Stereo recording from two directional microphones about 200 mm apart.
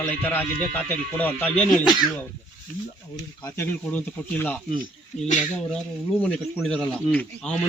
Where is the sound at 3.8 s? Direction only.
10° left (ahead or behind).